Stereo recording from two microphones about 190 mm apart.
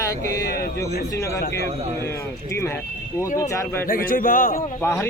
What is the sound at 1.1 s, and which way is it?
Speech, 15° left (ahead or behind).